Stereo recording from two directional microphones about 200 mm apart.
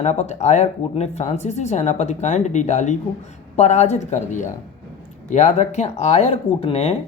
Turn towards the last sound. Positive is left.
turn(degrees=30)  # may be behind; listen again after turning